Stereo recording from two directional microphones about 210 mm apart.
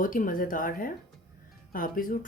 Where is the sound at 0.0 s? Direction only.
40° left (ahead or behind).